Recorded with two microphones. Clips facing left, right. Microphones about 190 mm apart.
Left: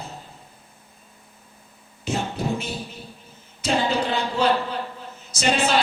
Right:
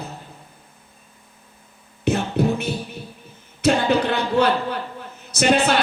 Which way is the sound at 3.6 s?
60° right (ahead or behind).